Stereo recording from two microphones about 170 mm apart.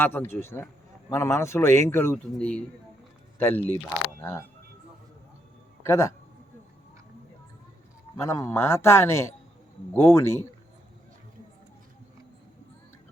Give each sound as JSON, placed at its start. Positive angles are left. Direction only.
{"t": 0.0, "sound": "a man's voice", "side_deg": 10}
{"t": 5.8, "sound": "a man's voice", "side_deg": 15}
{"t": 8.1, "sound": "a man's voice", "side_deg": 15}